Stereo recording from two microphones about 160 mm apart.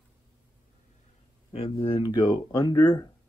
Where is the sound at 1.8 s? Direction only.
30° left (ahead or behind).